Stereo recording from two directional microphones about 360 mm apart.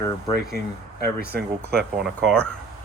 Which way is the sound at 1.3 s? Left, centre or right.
Right.